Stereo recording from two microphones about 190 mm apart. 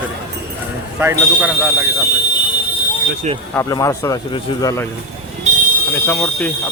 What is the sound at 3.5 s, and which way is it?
A man's voice, 15° left (ahead or behind).